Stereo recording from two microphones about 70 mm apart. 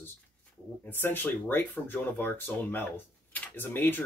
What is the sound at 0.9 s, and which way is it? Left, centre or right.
Speech, left.